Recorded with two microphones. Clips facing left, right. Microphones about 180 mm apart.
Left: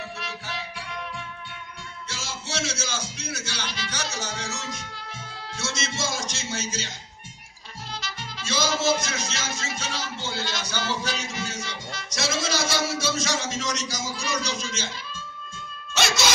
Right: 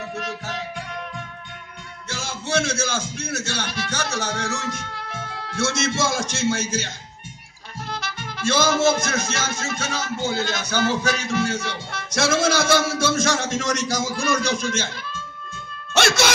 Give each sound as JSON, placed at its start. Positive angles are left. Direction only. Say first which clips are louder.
{"t": 0.2, "sound": "music", "louder": "right 5 dB", "side_deg": -45}
{"t": 2.0, "sound": "speech", "louder": "right 8 dB", "side_deg": -55}
{"t": 7.9, "sound": "music", "louder": "right 5 dB", "side_deg": -55}
{"t": 15.9, "sound": "cat", "louder": "right 6 dB", "side_deg": -60}